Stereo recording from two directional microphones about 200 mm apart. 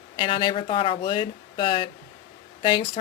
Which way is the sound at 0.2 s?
25° left (ahead or behind).